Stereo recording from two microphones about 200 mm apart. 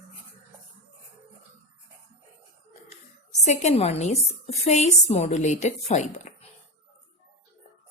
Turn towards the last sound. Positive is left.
turn(degrees=35)  # may be behind; listen again after turning